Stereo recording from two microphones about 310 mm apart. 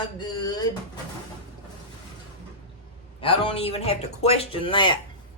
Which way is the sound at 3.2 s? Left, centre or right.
Centre.